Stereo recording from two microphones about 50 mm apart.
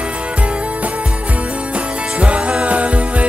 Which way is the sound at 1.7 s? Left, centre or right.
Right.